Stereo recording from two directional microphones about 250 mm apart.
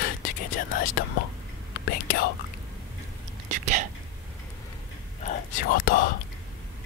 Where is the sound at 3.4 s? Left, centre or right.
Right.